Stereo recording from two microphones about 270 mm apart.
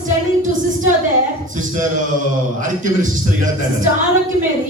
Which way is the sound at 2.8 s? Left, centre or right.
Right.